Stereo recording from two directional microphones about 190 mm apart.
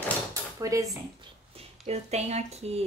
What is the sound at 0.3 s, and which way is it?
Drawer open or close, 15° right (ahead or behind).